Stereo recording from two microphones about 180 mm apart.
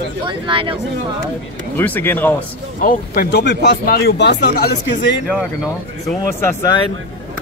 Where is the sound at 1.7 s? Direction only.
10° left (ahead or behind).